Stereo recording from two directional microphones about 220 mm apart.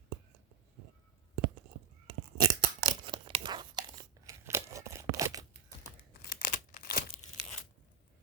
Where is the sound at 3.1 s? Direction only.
20° right (ahead or behind).